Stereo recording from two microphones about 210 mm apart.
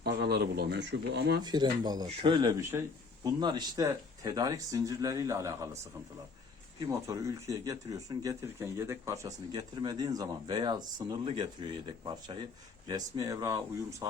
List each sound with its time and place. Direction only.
0.0 s speech: 50° right (ahead or behind)
1.4 s speech: 20° right (ahead or behind)
6.8 s speech: 15° right (ahead or behind)